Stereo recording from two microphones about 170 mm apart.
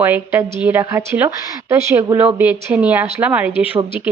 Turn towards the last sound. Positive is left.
turn(degrees=-10)  # may be behind; listen again after turning